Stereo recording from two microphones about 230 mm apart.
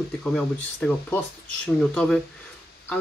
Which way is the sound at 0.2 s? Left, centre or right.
Centre.